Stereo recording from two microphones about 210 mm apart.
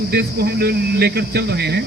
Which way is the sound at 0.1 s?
50° right (ahead or behind).